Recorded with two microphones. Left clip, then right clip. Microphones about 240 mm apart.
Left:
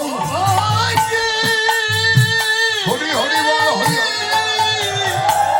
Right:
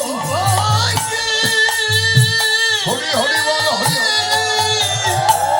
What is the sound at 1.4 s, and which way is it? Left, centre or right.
Music, right.